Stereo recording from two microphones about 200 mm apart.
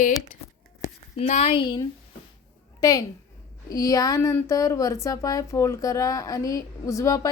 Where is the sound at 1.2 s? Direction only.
30° left (ahead or behind).